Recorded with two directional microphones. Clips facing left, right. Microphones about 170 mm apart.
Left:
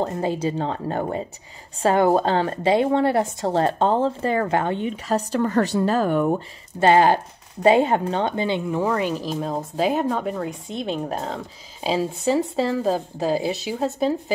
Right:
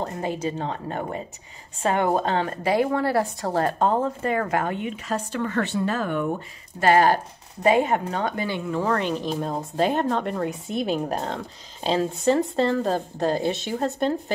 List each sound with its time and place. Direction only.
0.0 s a woman's voice: 30° left (ahead or behind)
6.8 s a woman's voice: 25° left (ahead or behind); by 14.1 s 5° left (ahead or behind)